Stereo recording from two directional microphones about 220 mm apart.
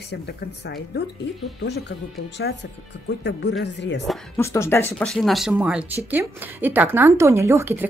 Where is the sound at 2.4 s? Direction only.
55° left (ahead or behind).